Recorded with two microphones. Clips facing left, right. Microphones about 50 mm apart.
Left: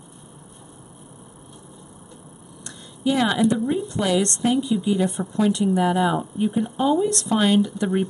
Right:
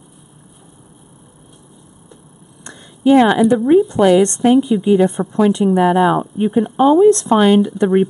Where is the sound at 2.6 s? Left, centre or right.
Right.